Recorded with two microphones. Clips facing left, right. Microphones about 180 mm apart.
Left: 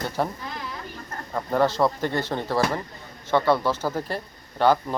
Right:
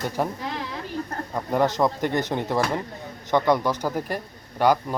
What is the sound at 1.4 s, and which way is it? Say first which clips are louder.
Speech: even; 15° right (ahead or behind).